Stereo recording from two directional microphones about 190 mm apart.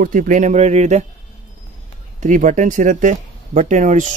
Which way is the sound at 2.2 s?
40° right (ahead or behind).